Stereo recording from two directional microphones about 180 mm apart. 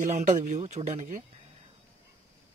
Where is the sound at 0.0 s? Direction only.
40° right (ahead or behind).